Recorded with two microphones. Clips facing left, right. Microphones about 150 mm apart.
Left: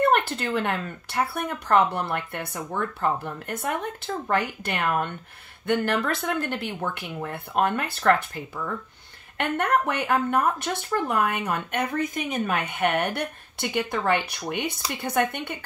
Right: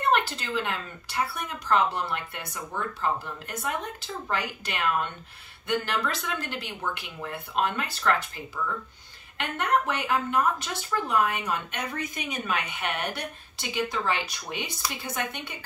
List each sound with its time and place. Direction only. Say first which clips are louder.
0.1 s speech: left 3 dB; 55° left (ahead or behind)
9.4 s speech: left 3 dB; 55° left (ahead or behind)